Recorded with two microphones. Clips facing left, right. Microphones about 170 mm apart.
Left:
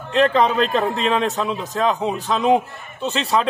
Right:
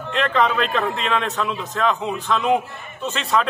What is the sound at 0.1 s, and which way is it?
A man's voice, 35° left (ahead or behind).